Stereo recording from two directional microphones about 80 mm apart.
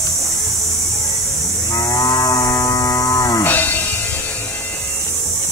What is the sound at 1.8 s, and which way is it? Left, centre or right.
Livestock, left.